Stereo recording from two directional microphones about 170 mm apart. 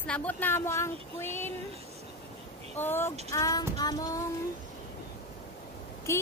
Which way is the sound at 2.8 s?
15° left (ahead or behind).